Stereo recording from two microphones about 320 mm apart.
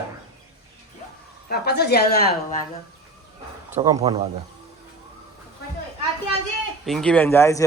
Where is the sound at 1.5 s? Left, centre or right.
Left.